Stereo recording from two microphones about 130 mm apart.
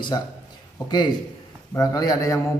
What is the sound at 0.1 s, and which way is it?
A man's voice, 30° left (ahead or behind).